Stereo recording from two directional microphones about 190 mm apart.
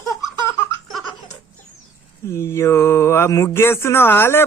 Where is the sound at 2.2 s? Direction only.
15° left (ahead or behind).